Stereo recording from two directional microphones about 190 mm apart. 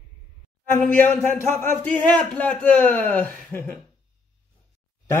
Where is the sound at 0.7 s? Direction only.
10° left (ahead or behind).